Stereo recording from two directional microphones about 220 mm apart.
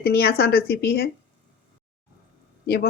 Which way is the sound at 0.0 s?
45° left (ahead or behind).